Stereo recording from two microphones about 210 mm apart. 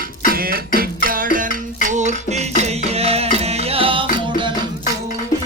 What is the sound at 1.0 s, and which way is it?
Music, 40° right (ahead or behind).